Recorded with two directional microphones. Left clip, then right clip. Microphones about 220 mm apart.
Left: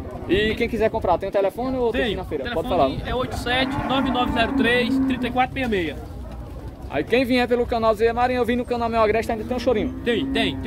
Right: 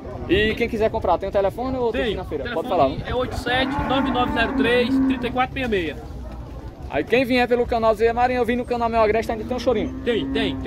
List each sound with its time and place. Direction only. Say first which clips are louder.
0.3 s speech: right 1 dB; 5° right (ahead or behind)
1.9 s speech: even; 45° left (ahead or behind)
6.9 s speech: right 1 dB; centre (ahead or behind)
10.0 s speech: even; 40° left (ahead or behind)